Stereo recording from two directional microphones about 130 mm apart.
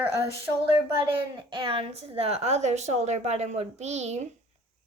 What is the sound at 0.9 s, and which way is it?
A woman's voice, 40° right (ahead or behind).